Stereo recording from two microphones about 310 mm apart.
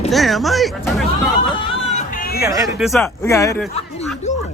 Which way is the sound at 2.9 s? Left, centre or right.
Centre.